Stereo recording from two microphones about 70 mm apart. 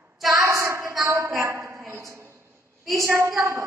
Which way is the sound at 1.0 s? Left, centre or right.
Right.